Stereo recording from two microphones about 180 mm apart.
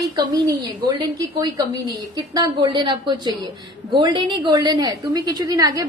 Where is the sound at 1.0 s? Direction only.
20° right (ahead or behind).